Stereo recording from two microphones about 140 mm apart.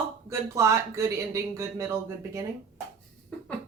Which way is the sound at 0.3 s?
20° right (ahead or behind).